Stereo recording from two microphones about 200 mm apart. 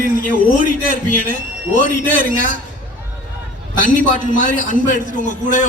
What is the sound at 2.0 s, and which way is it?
Speech, 45° right (ahead or behind).